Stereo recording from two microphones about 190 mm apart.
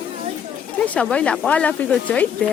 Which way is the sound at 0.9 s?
5° left (ahead or behind).